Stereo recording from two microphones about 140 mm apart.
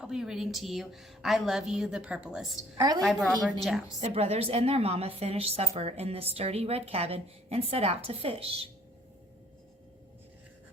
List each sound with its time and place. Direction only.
0.0 s a woman's voice: 5° right (ahead or behind)
2.7 s a woman's voice: 25° right (ahead or behind)
3.0 s a woman's voice: centre (ahead or behind)
4.0 s a woman's voice: 45° right (ahead or behind)